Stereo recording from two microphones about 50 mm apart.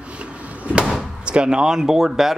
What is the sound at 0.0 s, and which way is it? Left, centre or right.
Slam, right.